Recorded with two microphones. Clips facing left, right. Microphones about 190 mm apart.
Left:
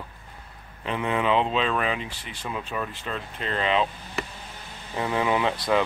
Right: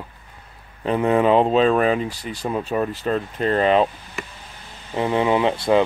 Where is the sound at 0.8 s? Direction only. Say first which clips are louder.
Right 8 dB; 40° right (ahead or behind).